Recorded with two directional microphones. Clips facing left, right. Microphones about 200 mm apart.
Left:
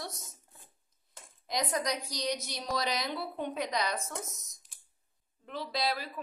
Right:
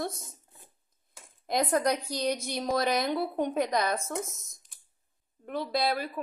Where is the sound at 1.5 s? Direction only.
55° right (ahead or behind).